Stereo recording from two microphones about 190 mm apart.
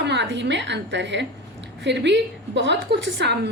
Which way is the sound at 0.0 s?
65° right (ahead or behind).